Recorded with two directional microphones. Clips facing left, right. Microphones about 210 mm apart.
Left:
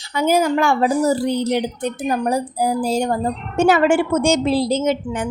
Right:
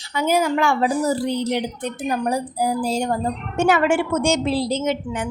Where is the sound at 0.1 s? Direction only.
40° left (ahead or behind).